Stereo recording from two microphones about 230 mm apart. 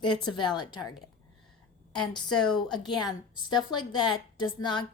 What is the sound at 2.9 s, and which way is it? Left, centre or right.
A woman's voice, centre.